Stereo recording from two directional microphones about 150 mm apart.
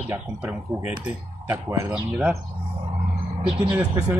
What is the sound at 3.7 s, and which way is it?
Speech, 20° right (ahead or behind).